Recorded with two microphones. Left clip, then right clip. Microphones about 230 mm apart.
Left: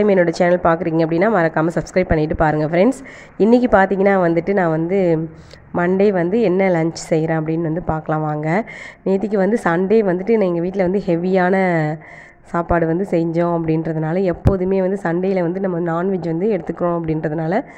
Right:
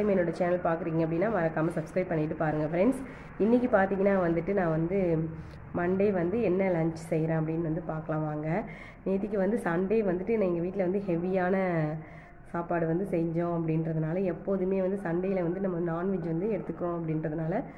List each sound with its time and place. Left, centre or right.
0.0 s a woman's voice: left